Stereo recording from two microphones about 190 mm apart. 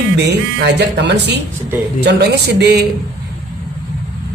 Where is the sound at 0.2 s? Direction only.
60° right (ahead or behind).